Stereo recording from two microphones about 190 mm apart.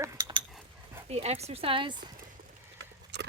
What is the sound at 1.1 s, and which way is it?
Speech, 35° right (ahead or behind).